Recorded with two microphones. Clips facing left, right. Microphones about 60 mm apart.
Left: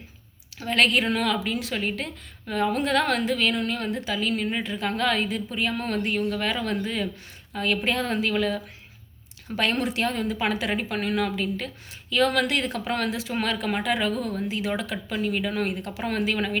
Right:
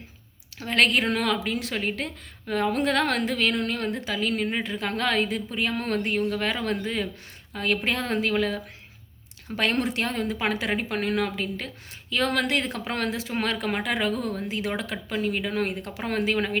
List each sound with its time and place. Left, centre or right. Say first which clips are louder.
0.6 s a woman's voice: even; right